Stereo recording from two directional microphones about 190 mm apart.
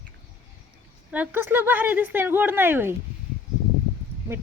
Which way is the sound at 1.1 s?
10° right (ahead or behind).